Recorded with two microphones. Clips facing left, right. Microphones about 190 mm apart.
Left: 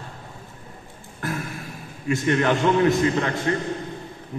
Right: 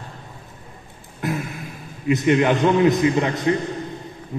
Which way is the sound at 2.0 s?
20° right (ahead or behind).